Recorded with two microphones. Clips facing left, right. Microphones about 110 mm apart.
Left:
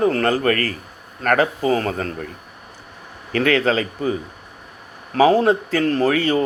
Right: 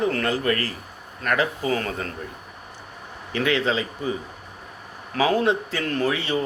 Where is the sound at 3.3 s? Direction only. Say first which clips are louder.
Left 5 dB; 50° left (ahead or behind).